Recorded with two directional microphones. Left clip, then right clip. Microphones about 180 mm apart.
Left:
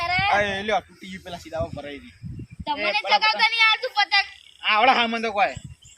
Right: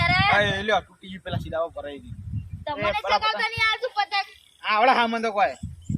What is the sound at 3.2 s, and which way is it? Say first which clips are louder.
Speech: left 5 dB; 25° right (ahead or behind).